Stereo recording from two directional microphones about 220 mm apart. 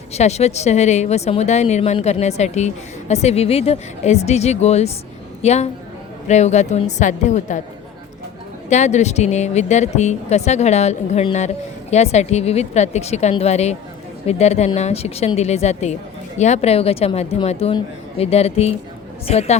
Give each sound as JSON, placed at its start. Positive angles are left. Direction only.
{"t": 0.1, "sound": "a woman's voice", "side_deg": 30}
{"t": 8.7, "sound": "a woman's voice", "side_deg": 30}